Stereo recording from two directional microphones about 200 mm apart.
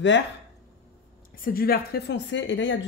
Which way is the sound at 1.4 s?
50° left (ahead or behind).